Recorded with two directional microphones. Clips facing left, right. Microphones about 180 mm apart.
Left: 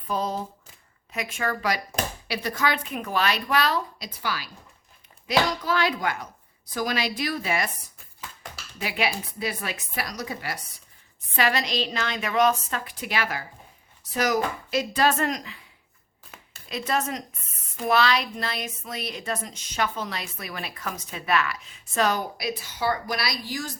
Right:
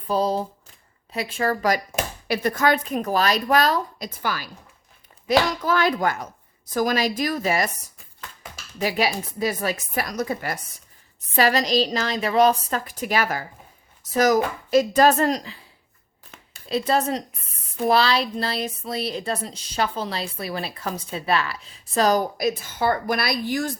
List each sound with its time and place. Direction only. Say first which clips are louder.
0.1 s a woman's voice: right 6 dB; 35° right (ahead or behind)
8.8 s a woman's voice: right 5 dB; 40° right (ahead or behind)
11.3 s a woman's voice: right 6 dB; 40° right (ahead or behind)
16.6 s a woman's voice: right 6 dB; 35° right (ahead or behind); by 23.7 s 55° right (ahead or behind)